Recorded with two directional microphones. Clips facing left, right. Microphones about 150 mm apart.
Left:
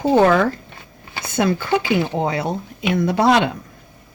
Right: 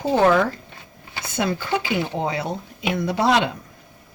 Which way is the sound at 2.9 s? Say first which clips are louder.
Left 4 dB; 55° left (ahead or behind).